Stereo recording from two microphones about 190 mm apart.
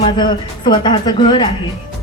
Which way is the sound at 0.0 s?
25° left (ahead or behind).